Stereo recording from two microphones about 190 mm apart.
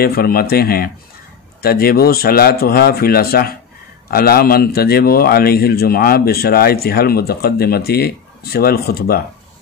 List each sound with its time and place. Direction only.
0.0 s speech: 55° left (ahead or behind)